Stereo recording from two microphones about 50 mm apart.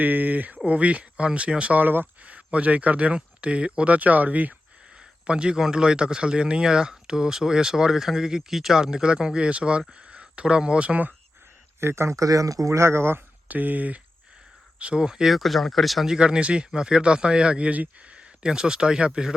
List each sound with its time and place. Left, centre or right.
0.0 s speech: right
2.2 s speech: right
5.2 s speech: centre
11.8 s speech: right
13.5 s speech: right
14.8 s speech: centre
16.1 s speech: centre